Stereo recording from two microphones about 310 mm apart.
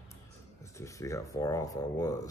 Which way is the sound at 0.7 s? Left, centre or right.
Centre.